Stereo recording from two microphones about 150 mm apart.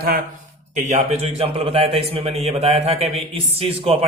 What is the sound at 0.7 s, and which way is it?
Speech, 55° right (ahead or behind).